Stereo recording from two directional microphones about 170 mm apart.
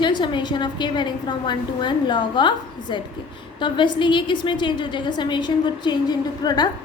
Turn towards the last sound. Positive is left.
turn(degrees=25)  # may be behind; listen again after turning